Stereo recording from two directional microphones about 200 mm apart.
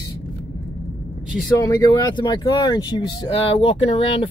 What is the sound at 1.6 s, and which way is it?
Speech, 20° left (ahead or behind).